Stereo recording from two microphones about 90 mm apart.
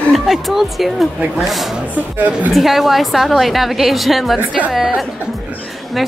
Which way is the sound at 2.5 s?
Centre (ahead or behind).